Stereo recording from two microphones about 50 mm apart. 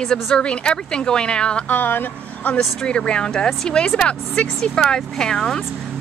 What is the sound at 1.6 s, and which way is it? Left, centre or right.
Speech, left.